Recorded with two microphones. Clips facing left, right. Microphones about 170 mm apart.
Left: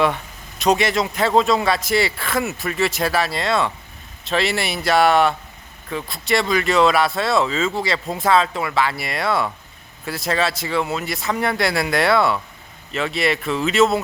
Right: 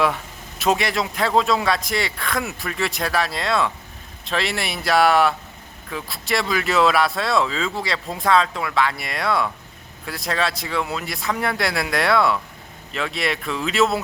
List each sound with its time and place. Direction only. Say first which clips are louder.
0.6 s speech: left 3 dB; centre (ahead or behind)